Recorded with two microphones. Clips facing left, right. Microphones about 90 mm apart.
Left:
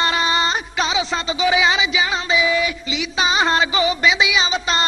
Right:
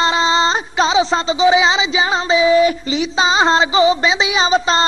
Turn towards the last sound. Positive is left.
turn(degrees=-35)  # may be behind; listen again after turning